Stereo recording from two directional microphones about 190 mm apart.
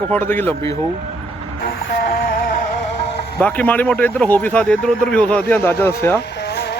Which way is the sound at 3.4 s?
5° left (ahead or behind).